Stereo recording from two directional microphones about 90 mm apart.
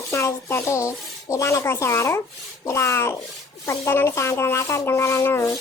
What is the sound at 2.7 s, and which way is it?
Rub, 30° left (ahead or behind).